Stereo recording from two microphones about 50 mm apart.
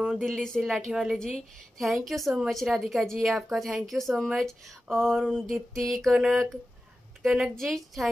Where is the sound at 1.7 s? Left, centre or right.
Centre.